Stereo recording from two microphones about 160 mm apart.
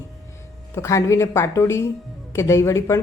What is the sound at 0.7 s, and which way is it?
A woman's voice, 20° left (ahead or behind).